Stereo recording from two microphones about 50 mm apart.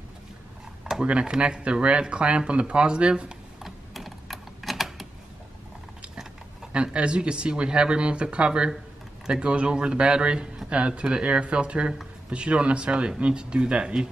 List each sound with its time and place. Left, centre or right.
1.0 s speech: right
3.6 s typing: centre
6.7 s speech: right